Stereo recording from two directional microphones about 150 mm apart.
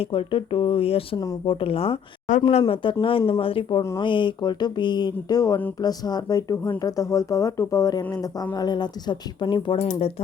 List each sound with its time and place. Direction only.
0.0 s speech: 35° left (ahead or behind)
2.2 s speech: 50° left (ahead or behind); by 9.7 s 30° left (ahead or behind)